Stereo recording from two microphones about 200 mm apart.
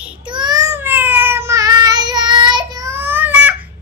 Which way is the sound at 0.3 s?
20° right (ahead or behind).